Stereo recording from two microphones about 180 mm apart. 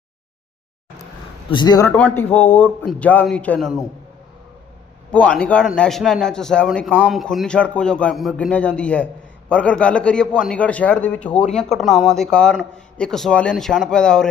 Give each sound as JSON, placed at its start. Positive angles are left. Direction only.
{"t": 1.5, "sound": "speech", "side_deg": 25}
{"t": 1.9, "sound": "a man's voice", "side_deg": 10}
{"t": 5.1, "sound": "a man's voice", "side_deg": 5}